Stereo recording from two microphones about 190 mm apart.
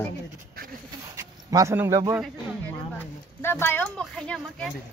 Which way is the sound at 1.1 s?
20° right (ahead or behind).